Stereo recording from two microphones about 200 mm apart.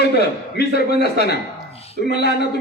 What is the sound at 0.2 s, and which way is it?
A man's voice, 55° left (ahead or behind).